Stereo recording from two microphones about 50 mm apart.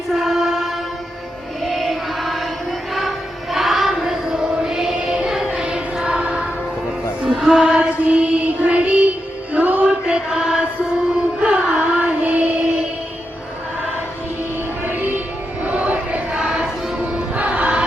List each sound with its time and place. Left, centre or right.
0.1 s music: centre
1.6 s chant: centre
3.5 s choir: centre
6.0 s music: centre
7.3 s mantra: centre
7.6 s music: right
9.8 s chant: centre
11.3 s music: centre
14.8 s music: right
15.6 s a sound: right
16.3 s music: centre